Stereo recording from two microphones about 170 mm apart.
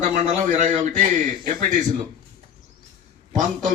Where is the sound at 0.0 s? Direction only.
45° right (ahead or behind).